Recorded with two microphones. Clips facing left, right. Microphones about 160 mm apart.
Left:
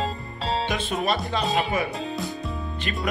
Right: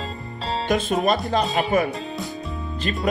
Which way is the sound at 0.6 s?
45° right (ahead or behind).